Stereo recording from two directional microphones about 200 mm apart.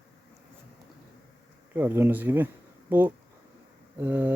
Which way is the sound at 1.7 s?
10° right (ahead or behind).